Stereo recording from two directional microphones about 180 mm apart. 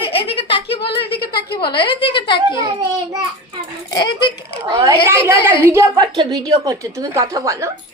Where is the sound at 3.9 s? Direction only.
25° left (ahead or behind).